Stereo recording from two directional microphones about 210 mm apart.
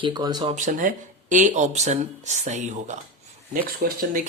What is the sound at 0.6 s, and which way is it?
Speech, 40° right (ahead or behind).